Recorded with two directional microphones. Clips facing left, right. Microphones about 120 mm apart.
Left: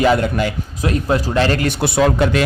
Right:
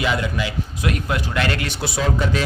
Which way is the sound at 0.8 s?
35° left (ahead or behind).